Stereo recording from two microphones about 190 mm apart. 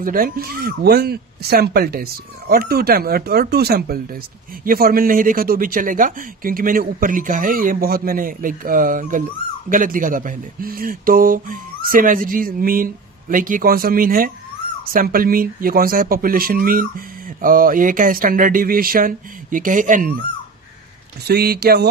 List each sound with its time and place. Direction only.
0.0 s speech: 50° right (ahead or behind)
21.2 s speech: 55° right (ahead or behind)